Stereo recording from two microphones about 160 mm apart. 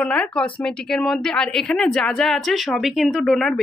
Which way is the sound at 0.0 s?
5° left (ahead or behind).